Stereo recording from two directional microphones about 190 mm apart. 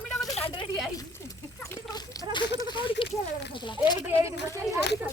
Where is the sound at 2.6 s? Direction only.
25° left (ahead or behind).